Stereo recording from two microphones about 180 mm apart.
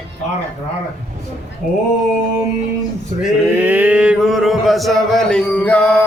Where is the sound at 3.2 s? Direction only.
10° right (ahead or behind); by 6.0 s 5° left (ahead or behind).